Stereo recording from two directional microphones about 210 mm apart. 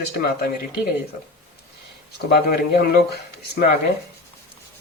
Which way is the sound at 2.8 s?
50° left (ahead or behind).